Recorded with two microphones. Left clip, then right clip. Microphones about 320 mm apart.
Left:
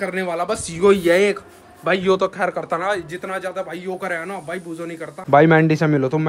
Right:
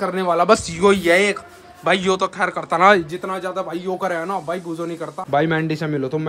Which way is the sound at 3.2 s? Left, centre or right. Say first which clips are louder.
Right 1 dB; centre.